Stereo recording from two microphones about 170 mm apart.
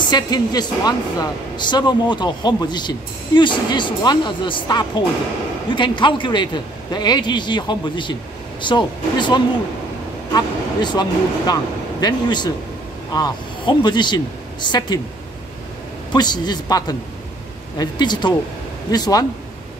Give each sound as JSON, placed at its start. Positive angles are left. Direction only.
{"t": 0.1, "sound": "a man's voice", "side_deg": 25}
{"t": 16.1, "sound": "a man's voice", "side_deg": 25}